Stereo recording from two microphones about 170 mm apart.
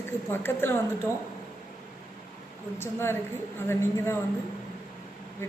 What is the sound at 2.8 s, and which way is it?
A woman's voice, 15° left (ahead or behind).